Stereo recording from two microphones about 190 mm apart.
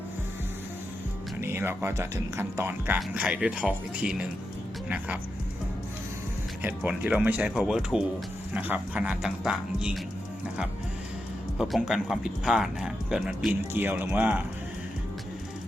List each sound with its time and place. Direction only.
1.4 s speech: 10° right (ahead or behind)
6.6 s speech: 10° right (ahead or behind)
11.5 s speech: centre (ahead or behind)